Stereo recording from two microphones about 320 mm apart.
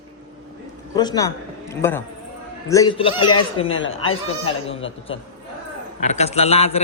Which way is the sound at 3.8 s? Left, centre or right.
Left.